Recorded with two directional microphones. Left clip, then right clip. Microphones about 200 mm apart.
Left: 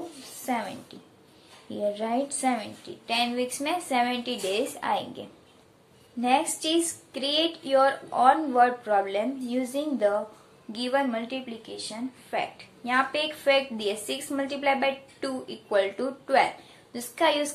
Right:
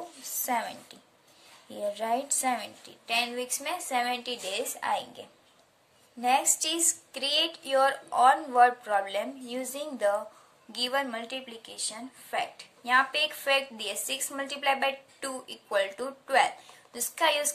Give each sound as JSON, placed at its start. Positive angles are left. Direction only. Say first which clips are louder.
{"t": 0.5, "sound": "a woman's voice", "louder": "even", "side_deg": -35}
{"t": 6.2, "sound": "a woman's voice", "louder": "left 1 dB", "side_deg": -30}